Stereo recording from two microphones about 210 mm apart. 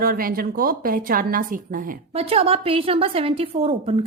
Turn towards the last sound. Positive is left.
turn(degrees=-30)  # may be behind; listen again after turning